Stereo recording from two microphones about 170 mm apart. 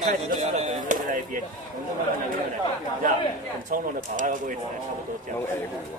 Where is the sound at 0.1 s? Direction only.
40° right (ahead or behind).